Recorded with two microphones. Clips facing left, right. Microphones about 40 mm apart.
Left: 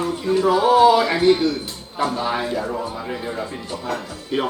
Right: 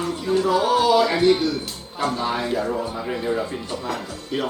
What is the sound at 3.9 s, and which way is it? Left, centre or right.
Speech, left.